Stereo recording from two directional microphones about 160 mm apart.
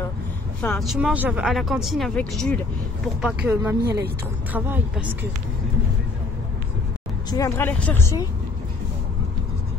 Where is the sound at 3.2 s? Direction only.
10° right (ahead or behind).